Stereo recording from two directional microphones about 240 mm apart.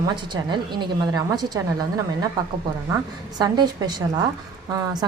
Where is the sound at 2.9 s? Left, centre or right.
Centre.